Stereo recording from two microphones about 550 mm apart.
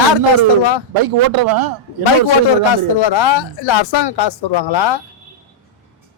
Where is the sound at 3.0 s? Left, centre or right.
Left.